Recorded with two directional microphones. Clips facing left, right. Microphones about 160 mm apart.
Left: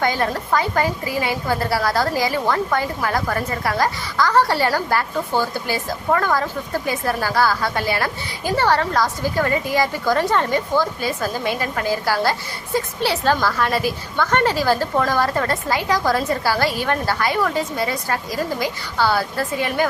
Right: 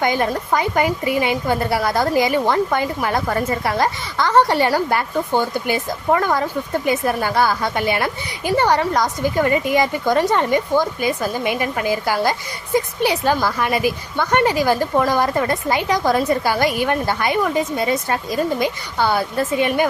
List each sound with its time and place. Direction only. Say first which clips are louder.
0.0 s a woman's voice: right 2 dB; 20° right (ahead or behind)